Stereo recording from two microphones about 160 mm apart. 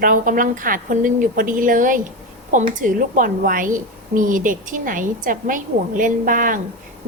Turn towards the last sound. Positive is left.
turn(degrees=-60)  # may be behind; listen again after turning